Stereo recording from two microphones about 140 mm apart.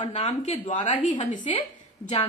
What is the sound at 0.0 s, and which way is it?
Speech, 45° left (ahead or behind).